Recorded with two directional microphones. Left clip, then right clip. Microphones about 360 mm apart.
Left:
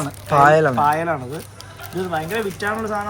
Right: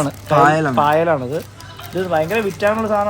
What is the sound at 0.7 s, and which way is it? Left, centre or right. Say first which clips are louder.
Speech: right 4 dB; centre.